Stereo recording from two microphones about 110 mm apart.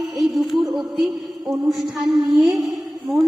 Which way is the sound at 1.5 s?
Centre (ahead or behind).